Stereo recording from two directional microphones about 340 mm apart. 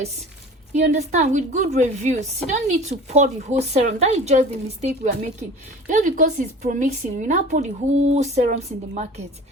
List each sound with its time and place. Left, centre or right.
0.7 s a woman's voice: centre